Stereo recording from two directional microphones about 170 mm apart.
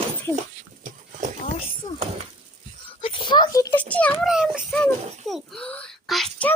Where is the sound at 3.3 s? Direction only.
25° left (ahead or behind).